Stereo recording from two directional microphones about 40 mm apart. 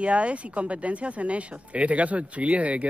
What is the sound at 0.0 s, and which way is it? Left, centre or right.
Speech, right.